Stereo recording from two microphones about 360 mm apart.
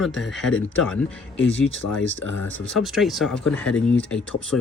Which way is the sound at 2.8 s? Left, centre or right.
Centre.